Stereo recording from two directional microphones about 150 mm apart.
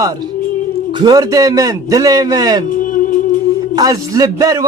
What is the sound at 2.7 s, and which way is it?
Music, 60° left (ahead or behind).